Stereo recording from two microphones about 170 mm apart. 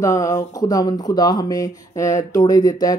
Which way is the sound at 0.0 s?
20° left (ahead or behind).